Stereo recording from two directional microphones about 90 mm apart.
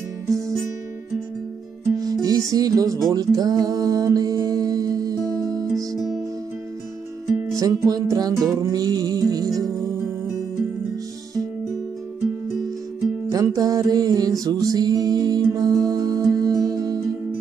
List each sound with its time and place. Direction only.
0.3 s music: 5° left (ahead or behind)
2.2 s music: 40° right (ahead or behind)
7.5 s music: 40° right (ahead or behind)
13.3 s music: 40° right (ahead or behind)